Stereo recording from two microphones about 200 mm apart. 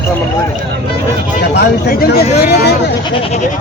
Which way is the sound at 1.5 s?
50° left (ahead or behind).